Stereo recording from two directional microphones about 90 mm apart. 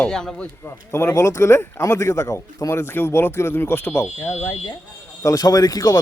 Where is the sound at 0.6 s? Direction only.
30° left (ahead or behind).